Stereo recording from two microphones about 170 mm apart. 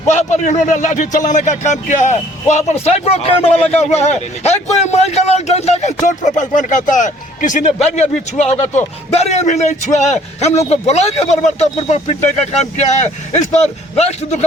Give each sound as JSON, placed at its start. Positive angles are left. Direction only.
{"t": 0.1, "sound": "a man's voice", "side_deg": 45}